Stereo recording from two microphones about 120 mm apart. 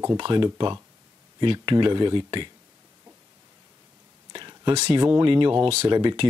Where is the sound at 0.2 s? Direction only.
40° right (ahead or behind).